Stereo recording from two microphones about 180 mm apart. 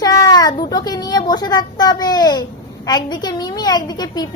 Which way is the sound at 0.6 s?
20° left (ahead or behind).